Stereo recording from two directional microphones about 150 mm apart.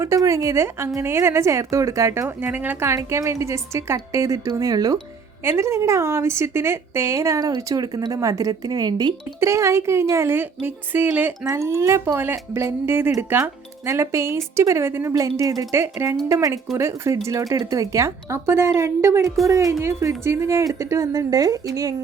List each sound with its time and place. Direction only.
0.0 s a woman's voice: 20° right (ahead or behind)